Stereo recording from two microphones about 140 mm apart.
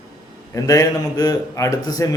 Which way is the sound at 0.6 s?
25° left (ahead or behind).